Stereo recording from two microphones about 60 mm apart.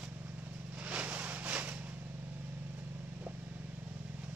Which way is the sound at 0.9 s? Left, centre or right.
Right.